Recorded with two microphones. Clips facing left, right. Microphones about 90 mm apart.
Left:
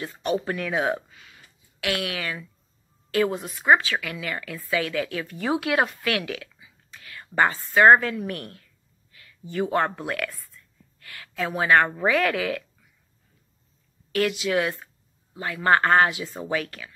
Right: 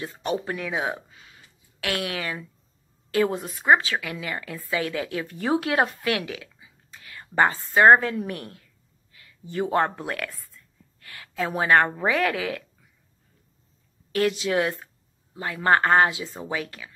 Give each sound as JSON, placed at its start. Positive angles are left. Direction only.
{"t": 0.0, "sound": "a woman's voice", "side_deg": -30}
{"t": 0.5, "sound": "speech", "side_deg": -10}
{"t": 1.8, "sound": "a woman's voice", "side_deg": -35}
{"t": 14.1, "sound": "a woman's voice", "side_deg": -35}